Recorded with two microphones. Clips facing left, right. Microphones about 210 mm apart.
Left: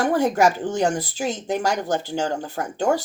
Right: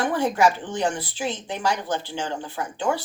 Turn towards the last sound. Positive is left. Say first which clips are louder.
# left 4 dB
turn(degrees=40)  # may be behind; listen again after turning